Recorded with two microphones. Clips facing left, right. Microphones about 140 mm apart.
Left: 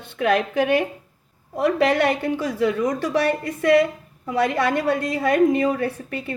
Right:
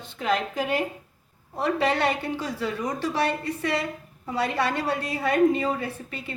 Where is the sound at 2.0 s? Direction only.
55° left (ahead or behind).